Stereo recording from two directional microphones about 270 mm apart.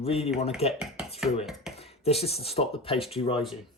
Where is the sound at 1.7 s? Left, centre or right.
Left.